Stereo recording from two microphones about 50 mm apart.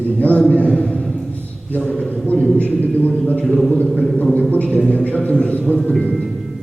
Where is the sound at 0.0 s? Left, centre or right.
Left.